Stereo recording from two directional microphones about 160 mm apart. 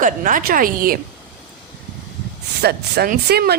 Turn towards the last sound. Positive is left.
turn(degrees=-85)